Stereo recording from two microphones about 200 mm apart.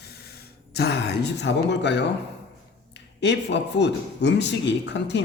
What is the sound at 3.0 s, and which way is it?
A man's voice, 60° left (ahead or behind).